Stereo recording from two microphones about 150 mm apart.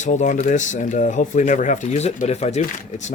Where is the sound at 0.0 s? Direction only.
55° left (ahead or behind).